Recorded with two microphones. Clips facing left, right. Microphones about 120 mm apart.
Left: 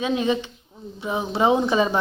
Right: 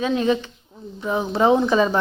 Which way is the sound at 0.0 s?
15° left (ahead or behind).